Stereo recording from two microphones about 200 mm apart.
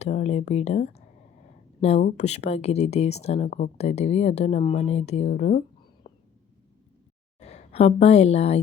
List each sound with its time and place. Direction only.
0.0 s speech: 35° left (ahead or behind)
6.0 s a sound: 25° left (ahead or behind)
7.3 s a woman's voice: 30° left (ahead or behind)